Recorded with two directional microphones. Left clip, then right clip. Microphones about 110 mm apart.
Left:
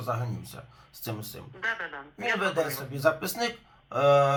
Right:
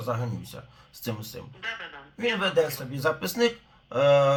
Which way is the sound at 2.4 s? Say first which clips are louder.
Right 3 dB; 20° right (ahead or behind).